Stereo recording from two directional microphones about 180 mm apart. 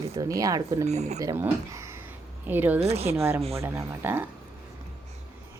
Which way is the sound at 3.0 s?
15° right (ahead or behind).